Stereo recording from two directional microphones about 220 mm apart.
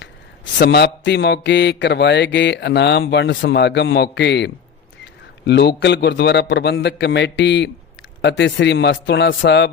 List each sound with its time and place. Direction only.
0.6 s speech: 50° left (ahead or behind)